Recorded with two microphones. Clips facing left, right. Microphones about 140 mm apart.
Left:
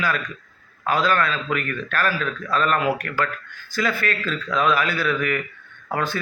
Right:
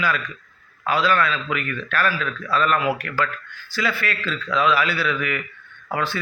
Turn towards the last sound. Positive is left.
turn(degrees=45)  # may be behind; listen again after turning